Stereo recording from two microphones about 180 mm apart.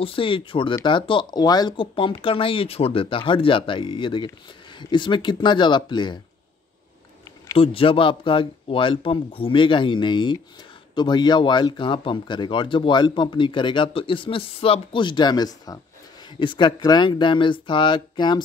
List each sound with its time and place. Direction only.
0.0 s speech: 30° left (ahead or behind)
7.5 s speech: 30° left (ahead or behind)